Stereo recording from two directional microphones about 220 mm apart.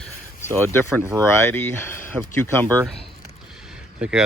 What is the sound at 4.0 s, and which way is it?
Speech, 5° right (ahead or behind).